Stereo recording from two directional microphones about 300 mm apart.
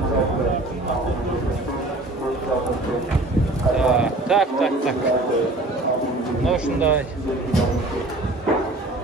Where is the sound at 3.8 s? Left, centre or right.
Centre.